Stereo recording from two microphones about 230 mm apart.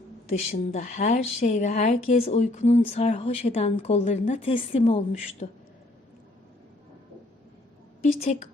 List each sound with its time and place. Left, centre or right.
0.3 s speech: left
8.0 s a woman's voice: left